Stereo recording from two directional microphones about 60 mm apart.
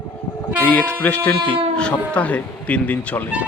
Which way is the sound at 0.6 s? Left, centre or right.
Left.